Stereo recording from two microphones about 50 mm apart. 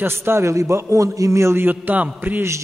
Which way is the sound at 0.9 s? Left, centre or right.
Right.